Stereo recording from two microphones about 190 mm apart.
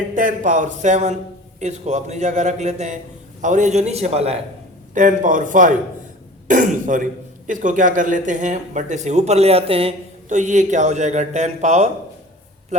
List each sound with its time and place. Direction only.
0.1 s a man's voice: 45° right (ahead or behind)